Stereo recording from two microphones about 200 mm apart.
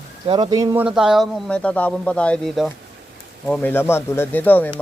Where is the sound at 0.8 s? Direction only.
Centre (ahead or behind).